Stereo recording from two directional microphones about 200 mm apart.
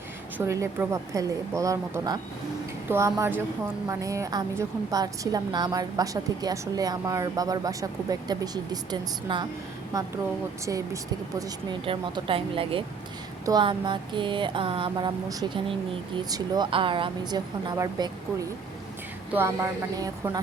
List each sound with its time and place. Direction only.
0.3 s a woman's voice: 15° right (ahead or behind)
10.7 s a woman's voice: 15° right (ahead or behind)